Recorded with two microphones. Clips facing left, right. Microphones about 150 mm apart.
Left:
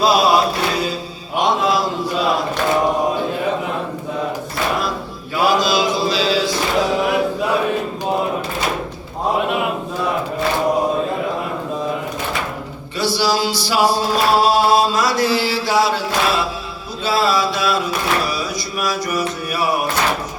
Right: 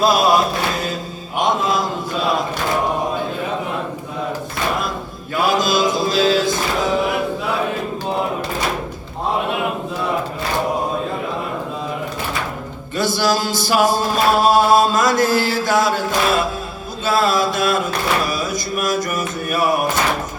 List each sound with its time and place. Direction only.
0.0 s chant: 50° right (ahead or behind)
1.4 s mantra: 50° right (ahead or behind)
5.4 s mantra: 50° right (ahead or behind)
13.0 s chant: 50° right (ahead or behind)
17.1 s mantra: 50° right (ahead or behind)
18.3 s a sound: 50° right (ahead or behind)